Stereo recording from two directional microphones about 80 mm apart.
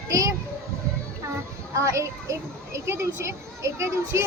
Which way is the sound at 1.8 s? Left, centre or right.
Right.